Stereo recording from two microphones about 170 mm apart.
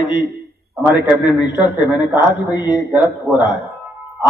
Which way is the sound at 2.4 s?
25° left (ahead or behind).